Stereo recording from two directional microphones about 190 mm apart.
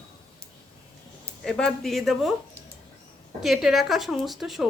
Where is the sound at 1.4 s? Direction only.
5° left (ahead or behind).